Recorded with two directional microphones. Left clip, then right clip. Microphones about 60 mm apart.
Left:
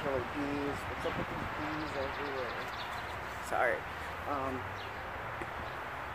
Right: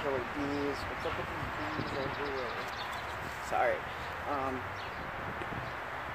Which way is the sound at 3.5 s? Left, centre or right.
Left.